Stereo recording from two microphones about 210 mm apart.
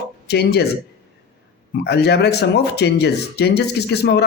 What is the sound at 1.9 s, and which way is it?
Speech, 50° left (ahead or behind).